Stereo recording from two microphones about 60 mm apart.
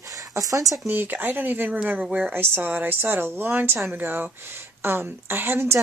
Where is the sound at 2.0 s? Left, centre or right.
Centre.